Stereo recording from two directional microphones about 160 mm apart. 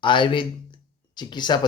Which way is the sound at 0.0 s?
30° left (ahead or behind).